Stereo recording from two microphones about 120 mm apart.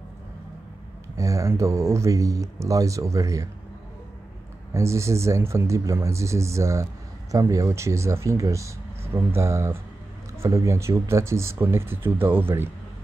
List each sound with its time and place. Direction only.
1.1 s speech: 25° right (ahead or behind)
4.7 s speech: 25° right (ahead or behind)